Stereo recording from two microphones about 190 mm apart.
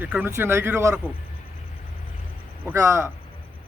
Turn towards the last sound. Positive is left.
turn(degrees=-15)  # may be behind; listen again after turning